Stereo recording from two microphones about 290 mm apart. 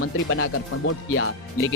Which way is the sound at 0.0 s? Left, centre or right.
Left.